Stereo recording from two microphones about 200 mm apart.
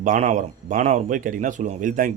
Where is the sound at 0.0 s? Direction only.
40° right (ahead or behind).